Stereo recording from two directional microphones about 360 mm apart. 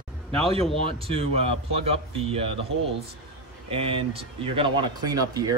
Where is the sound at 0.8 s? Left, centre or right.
Centre.